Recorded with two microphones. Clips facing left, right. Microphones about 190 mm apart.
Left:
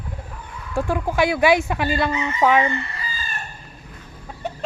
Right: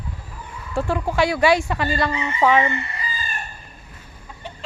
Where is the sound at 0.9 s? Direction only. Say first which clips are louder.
Even; 15° left (ahead or behind).